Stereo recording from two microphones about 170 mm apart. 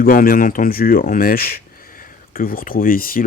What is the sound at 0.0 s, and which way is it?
Speech, 55° left (ahead or behind).